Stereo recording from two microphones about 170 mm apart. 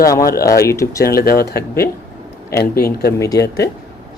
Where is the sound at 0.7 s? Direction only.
20° left (ahead or behind).